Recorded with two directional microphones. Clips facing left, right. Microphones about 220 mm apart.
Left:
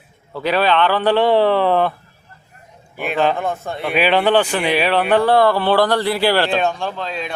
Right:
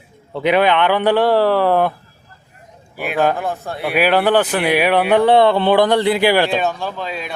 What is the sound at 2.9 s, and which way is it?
Speech, 5° right (ahead or behind).